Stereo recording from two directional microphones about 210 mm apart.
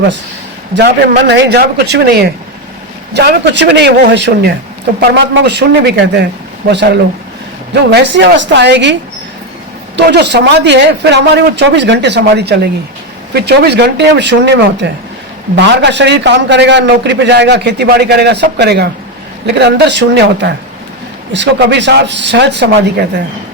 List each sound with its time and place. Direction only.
0.7 s a man's voice: 50° right (ahead or behind)